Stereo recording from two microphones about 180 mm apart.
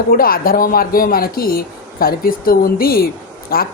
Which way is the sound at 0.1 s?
55° left (ahead or behind).